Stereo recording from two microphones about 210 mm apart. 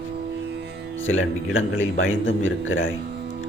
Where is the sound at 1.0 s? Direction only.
70° left (ahead or behind).